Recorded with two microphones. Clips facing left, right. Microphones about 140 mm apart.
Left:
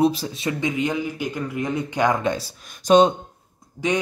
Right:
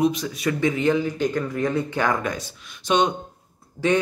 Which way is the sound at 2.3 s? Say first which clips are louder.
Left 3 dB; 35° left (ahead or behind).